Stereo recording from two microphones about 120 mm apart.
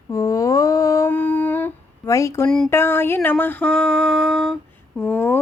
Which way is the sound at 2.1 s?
25° left (ahead or behind).